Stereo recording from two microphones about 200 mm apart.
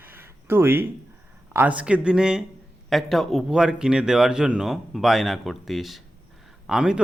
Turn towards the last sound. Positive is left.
turn(degrees=-5)  # may be behind; listen again after turning